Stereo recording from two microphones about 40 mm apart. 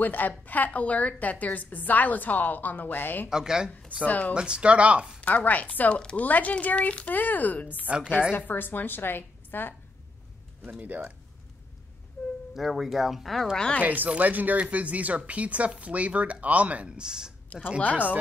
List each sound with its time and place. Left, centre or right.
0.0 s a woman's voice: left
3.3 s speech: centre
4.0 s speech: left
4.4 s speech: right
5.2 s speech: left
7.2 s a woman's voice: left
7.9 s speech: right
8.3 s a woman's voice: left
10.7 s speech: right
12.5 s speech: centre
13.8 s speech: right
16.9 s speech: centre
17.5 s a woman's voice: left